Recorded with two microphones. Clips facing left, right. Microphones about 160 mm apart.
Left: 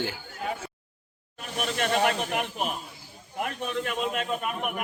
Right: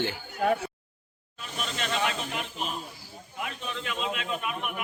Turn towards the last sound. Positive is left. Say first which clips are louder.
# left 3 dB
turn(degrees=45)  # may be behind; listen again after turning